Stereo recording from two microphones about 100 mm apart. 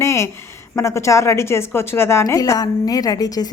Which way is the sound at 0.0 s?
30° left (ahead or behind).